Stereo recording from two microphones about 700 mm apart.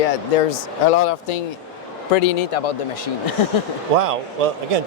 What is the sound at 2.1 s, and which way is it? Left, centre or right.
Speech, left.